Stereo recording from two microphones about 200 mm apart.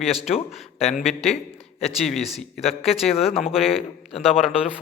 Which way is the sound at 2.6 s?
30° left (ahead or behind).